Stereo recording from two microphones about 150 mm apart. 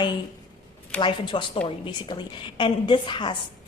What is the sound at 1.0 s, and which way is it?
A woman's voice, 30° left (ahead or behind).